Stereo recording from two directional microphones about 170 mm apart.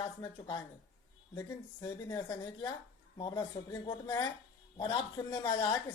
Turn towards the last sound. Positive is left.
turn(degrees=30)  # may be behind; listen again after turning